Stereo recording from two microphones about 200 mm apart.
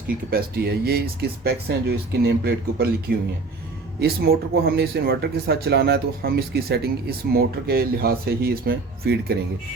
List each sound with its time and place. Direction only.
0.3 s speech: 50° right (ahead or behind)